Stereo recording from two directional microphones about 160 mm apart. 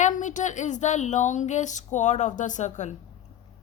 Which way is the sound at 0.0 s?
50° left (ahead or behind).